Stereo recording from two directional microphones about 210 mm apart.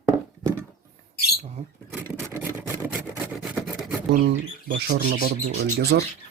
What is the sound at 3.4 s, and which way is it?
Filing, 5° right (ahead or behind).